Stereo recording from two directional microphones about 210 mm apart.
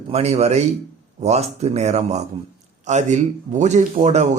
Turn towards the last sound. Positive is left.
turn(degrees=-35)  # may be behind; listen again after turning